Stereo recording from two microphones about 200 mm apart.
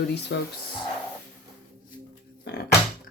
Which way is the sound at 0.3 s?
55° left (ahead or behind).